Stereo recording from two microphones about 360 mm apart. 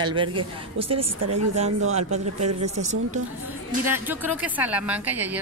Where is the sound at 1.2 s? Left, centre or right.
Right.